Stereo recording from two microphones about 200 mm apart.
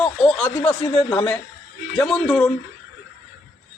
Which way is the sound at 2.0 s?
5° left (ahead or behind).